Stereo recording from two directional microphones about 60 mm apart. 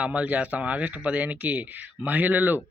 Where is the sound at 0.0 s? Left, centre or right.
Right.